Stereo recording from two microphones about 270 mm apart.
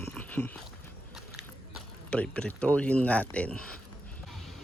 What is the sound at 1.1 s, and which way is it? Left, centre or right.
Speech, centre.